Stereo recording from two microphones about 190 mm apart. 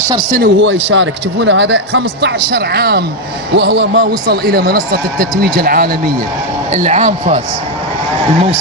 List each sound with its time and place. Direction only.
0.3 s a man's voice: 65° right (ahead or behind)
6.7 s a man's voice: 40° right (ahead or behind)